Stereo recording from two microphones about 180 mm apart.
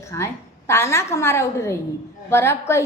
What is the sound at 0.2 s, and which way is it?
A woman's voice, 15° left (ahead or behind).